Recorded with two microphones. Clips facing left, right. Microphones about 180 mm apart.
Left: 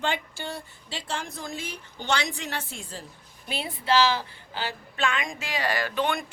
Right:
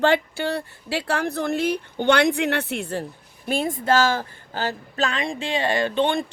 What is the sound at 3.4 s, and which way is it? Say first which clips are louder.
Speech: right 6 dB; 45° right (ahead or behind).